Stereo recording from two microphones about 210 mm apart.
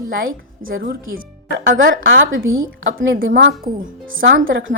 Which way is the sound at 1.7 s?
60° right (ahead or behind).